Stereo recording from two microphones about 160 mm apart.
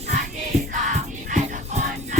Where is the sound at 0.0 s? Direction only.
55° right (ahead or behind).